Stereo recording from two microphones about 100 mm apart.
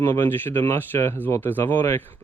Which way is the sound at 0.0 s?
25° left (ahead or behind).